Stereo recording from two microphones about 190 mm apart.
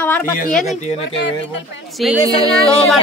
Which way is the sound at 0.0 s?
10° left (ahead or behind).